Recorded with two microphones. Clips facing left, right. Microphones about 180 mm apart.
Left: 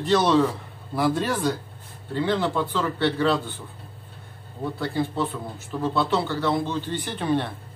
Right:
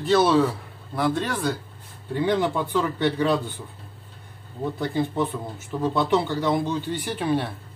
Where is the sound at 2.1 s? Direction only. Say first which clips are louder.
Right 1 dB; 15° right (ahead or behind).